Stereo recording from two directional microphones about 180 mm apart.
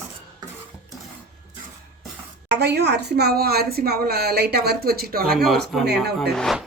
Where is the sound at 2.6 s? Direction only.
70° right (ahead or behind).